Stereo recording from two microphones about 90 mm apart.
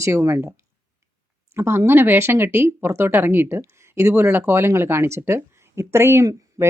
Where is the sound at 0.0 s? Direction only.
30° right (ahead or behind).